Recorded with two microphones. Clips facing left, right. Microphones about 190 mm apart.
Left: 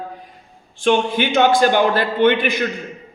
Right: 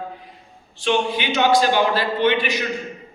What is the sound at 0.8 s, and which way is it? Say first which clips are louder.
A man's voice: left 4 dB; 50° left (ahead or behind).